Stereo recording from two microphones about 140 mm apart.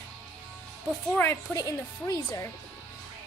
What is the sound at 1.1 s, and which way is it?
A child's voice, 15° left (ahead or behind).